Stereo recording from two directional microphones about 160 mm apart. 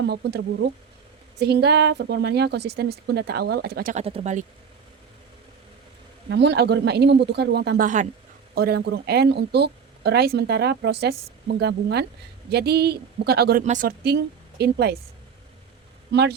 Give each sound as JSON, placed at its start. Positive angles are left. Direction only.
{"t": 0.0, "sound": "a woman's voice", "side_deg": -90}
{"t": 3.9, "sound": "speech", "side_deg": -40}
{"t": 6.3, "sound": "a woman's voice", "side_deg": -90}
{"t": 8.5, "sound": "a woman's voice", "side_deg": -75}
{"t": 13.6, "sound": "speech", "side_deg": -55}
{"t": 14.0, "sound": "a woman's voice", "side_deg": -90}